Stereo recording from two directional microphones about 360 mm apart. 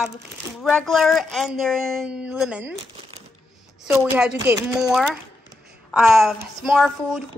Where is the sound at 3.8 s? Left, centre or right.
Centre.